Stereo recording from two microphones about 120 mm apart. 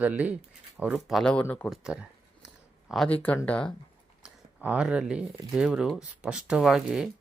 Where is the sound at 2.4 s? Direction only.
5° right (ahead or behind).